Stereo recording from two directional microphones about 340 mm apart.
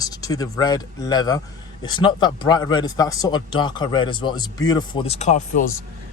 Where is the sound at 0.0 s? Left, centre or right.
Centre.